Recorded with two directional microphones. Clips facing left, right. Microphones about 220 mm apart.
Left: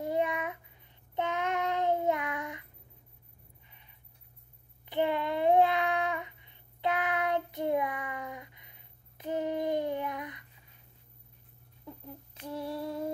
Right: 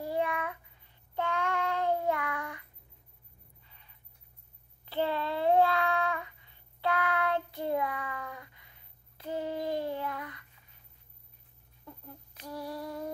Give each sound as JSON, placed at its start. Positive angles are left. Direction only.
{"t": 0.0, "sound": "child singing", "side_deg": 20}
{"t": 3.6, "sound": "a sound", "side_deg": 20}
{"t": 4.8, "sound": "child singing", "side_deg": 15}
{"t": 12.4, "sound": "female singing", "side_deg": 25}